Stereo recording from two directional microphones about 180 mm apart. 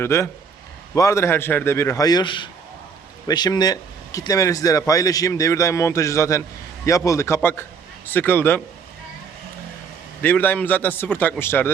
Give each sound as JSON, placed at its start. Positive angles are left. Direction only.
{"t": 0.0, "sound": "a man's voice", "side_deg": 15}
{"t": 10.2, "sound": "a man's voice", "side_deg": 10}